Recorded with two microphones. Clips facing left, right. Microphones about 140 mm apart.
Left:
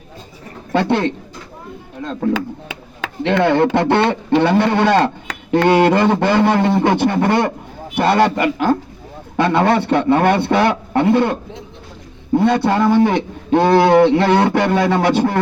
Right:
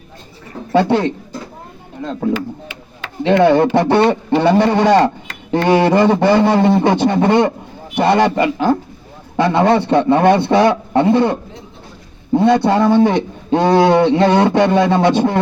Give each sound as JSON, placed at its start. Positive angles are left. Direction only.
{"t": 0.7, "sound": "a man's voice", "side_deg": -15}
{"t": 3.2, "sound": "a man's voice", "side_deg": -15}